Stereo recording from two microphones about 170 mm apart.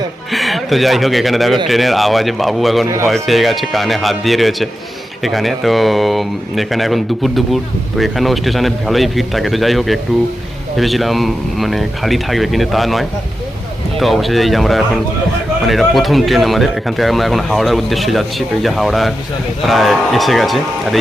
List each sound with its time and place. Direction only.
0.3 s speech: centre (ahead or behind)